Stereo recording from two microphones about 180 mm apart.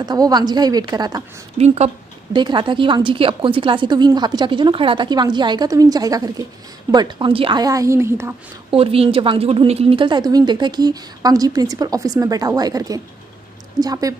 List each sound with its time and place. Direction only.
0.0 s a woman's voice: 20° right (ahead or behind)
1.6 s a woman's voice: 35° right (ahead or behind); by 8.4 s 15° right (ahead or behind)
8.6 s a woman's voice: 30° right (ahead or behind)